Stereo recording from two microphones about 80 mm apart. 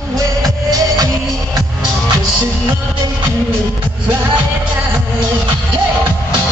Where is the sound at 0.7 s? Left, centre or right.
Right.